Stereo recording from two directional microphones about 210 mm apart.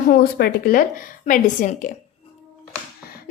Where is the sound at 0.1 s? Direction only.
50° left (ahead or behind).